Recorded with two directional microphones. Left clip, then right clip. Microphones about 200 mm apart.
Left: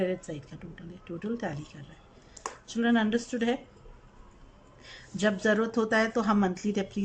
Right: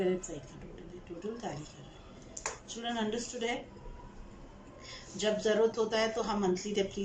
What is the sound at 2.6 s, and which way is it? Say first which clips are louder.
Speech: left 9 dB; 55° left (ahead or behind).